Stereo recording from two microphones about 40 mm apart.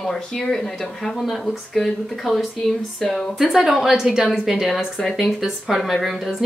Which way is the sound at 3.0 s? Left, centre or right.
Centre.